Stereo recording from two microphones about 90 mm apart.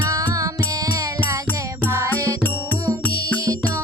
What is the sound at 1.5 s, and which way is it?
Music, 20° left (ahead or behind).